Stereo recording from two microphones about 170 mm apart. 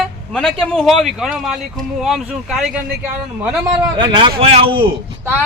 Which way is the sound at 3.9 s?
30° right (ahead or behind).